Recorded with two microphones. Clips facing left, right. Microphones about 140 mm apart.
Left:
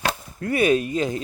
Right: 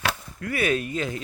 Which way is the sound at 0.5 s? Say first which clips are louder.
Left 5 dB; 20° left (ahead or behind).